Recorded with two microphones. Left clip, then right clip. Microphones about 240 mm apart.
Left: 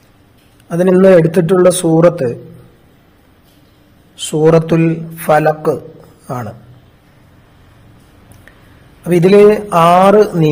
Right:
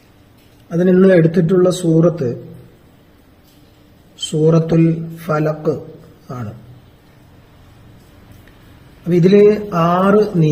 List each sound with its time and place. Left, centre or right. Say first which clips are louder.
0.7 s a man's voice: left 4 dB; left
4.2 s a man's voice: left 5 dB; left
9.0 s a man's voice: left 4 dB; left